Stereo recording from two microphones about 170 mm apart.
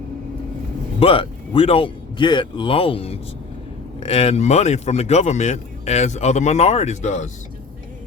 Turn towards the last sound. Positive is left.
turn(degrees=45)  # may be behind; listen again after turning